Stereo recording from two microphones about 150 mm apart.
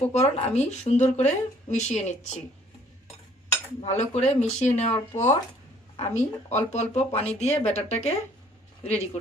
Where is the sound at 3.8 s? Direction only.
45° left (ahead or behind).